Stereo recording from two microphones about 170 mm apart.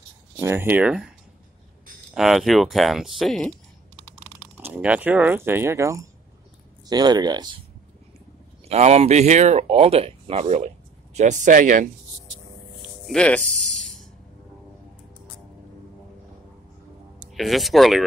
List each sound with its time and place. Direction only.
0.4 s speech: 15° right (ahead or behind)
2.1 s speech: centre (ahead or behind)
4.6 s speech: 10° right (ahead or behind)
8.6 s speech: 40° right (ahead or behind)
13.0 s speech: 5° left (ahead or behind)
13.6 s music: centre (ahead or behind)
17.3 s speech: centre (ahead or behind)